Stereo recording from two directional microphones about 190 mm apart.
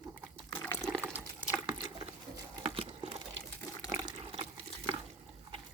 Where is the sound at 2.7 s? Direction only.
30° right (ahead or behind).